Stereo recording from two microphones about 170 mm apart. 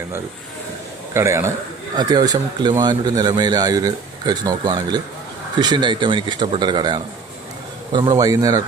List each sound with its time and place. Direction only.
1.1 s a man's voice: 15° right (ahead or behind)